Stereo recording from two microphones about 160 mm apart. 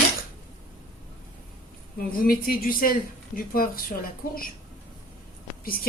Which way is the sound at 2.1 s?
65° left (ahead or behind).